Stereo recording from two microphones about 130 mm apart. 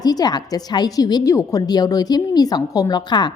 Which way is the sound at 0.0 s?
30° left (ahead or behind).